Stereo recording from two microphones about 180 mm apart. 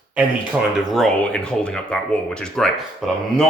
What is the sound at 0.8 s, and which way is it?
Speech, centre (ahead or behind).